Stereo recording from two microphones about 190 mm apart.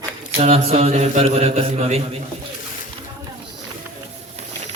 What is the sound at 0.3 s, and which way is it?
A man's voice, 35° right (ahead or behind).